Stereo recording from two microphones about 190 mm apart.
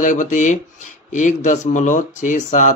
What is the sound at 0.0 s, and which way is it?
Speech, 40° left (ahead or behind).